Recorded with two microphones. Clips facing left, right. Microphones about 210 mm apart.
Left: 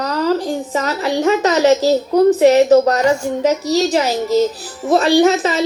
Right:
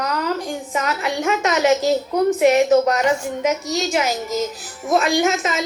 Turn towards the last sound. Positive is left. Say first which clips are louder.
# left 7 dB
turn(degrees=30)  # may be behind; listen again after turning